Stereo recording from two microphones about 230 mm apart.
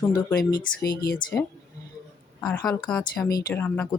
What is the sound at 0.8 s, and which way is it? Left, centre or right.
Speech, left.